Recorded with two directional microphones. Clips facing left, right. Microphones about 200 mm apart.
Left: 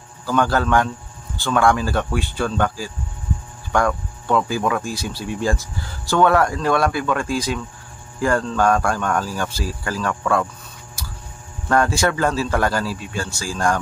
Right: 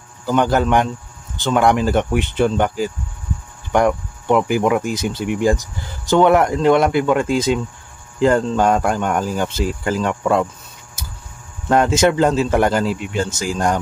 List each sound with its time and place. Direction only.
0.2 s speech: 20° right (ahead or behind)
11.0 s a sound: 20° right (ahead or behind)
11.7 s speech: 20° right (ahead or behind)